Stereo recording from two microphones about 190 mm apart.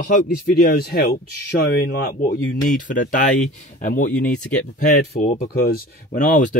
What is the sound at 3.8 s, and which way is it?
Speech, 45° left (ahead or behind).